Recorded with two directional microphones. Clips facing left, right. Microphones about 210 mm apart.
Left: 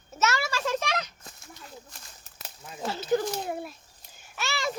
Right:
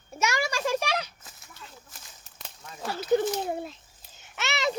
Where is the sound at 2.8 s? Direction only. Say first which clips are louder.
Even; 20° left (ahead or behind).